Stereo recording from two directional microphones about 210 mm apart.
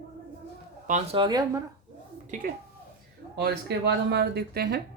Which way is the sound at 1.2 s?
20° right (ahead or behind).